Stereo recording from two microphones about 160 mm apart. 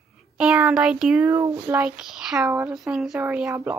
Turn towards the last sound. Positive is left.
turn(degrees=-10)  # may be behind; listen again after turning